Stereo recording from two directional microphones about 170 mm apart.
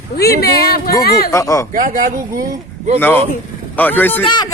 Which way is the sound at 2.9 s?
10° left (ahead or behind).